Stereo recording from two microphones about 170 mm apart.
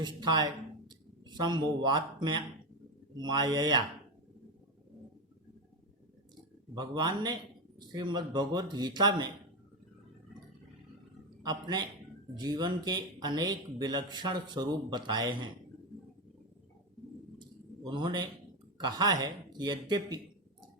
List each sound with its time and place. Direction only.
0.0 s speech: 25° right (ahead or behind)
0.9 s a sound: 25° right (ahead or behind)
3.2 s speech: 25° right (ahead or behind)
6.7 s speech: 25° right (ahead or behind)
11.4 s speech: 25° right (ahead or behind)
17.3 s a sound: 25° right (ahead or behind)
18.8 s speech: 25° right (ahead or behind)